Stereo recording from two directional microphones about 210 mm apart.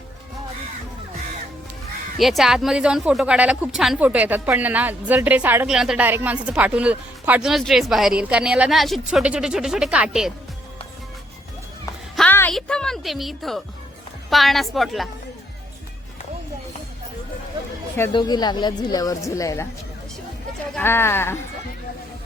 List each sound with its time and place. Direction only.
2.1 s speech: centre (ahead or behind)
12.1 s a woman's voice: 5° left (ahead or behind)
18.1 s a woman's voice: 20° left (ahead or behind)
20.7 s speech: 10° left (ahead or behind)